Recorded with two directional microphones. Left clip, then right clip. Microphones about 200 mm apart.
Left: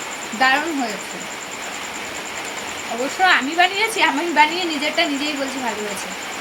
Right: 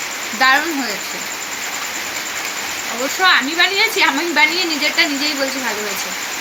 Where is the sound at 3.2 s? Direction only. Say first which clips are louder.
Right 2 dB; 15° left (ahead or behind).